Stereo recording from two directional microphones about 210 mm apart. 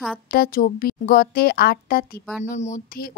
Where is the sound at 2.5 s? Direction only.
35° left (ahead or behind).